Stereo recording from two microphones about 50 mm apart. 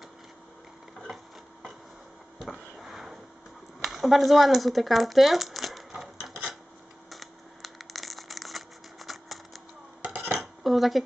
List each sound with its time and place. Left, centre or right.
2.5 s sniff: centre
3.8 s speech: centre
7.1 s a sound: centre
10.0 s dishes: right
10.4 s dishes: centre